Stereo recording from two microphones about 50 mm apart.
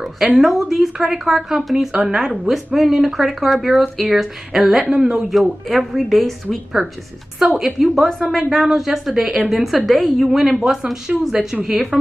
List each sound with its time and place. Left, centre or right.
0.4 s speech: centre
5.3 s speech: centre